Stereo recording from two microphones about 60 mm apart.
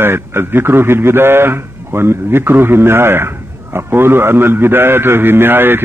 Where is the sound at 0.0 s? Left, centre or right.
Right.